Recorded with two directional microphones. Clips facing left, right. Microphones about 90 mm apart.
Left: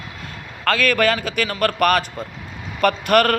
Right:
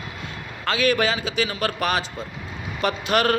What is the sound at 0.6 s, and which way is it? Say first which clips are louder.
A man's voice: left 3 dB; 55° left (ahead or behind).